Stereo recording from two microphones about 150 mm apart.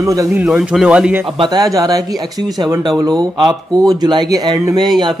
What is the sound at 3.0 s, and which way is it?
Speech, 25° right (ahead or behind).